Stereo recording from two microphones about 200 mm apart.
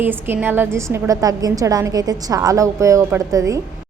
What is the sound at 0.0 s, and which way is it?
A woman's voice, 10° right (ahead or behind).